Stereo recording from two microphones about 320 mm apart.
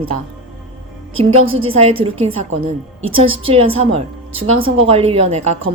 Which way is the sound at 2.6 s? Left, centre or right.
Right.